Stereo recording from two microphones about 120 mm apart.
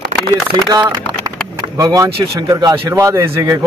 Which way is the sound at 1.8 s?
30° right (ahead or behind).